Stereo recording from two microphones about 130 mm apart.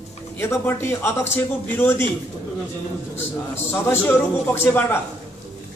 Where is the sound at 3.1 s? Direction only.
20° left (ahead or behind).